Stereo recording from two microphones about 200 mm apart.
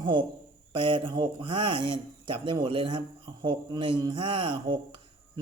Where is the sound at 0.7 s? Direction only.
25° right (ahead or behind).